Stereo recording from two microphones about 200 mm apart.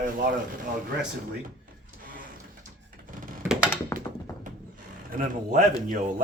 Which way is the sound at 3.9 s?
20° left (ahead or behind).